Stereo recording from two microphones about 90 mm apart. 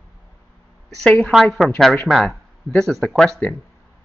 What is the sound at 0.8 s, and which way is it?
A woman's voice, 10° left (ahead or behind).